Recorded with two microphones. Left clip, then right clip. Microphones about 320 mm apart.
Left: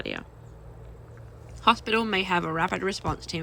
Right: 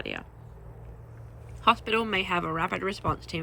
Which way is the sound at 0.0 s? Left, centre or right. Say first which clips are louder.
Left 1 dB; centre.